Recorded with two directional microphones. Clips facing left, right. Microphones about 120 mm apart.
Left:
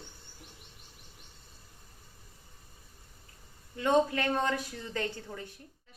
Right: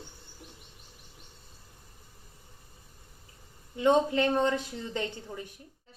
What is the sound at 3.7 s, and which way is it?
A woman's voice, 20° right (ahead or behind).